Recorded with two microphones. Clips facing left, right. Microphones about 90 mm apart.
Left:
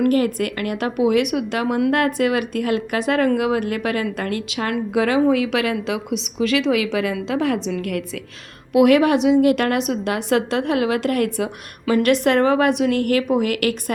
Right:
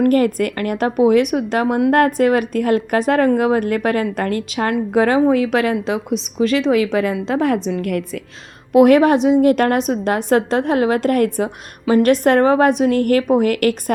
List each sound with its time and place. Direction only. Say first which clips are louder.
0.0 s speech: right 3 dB; 45° right (ahead or behind)